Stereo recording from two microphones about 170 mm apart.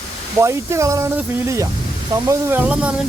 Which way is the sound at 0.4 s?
15° right (ahead or behind).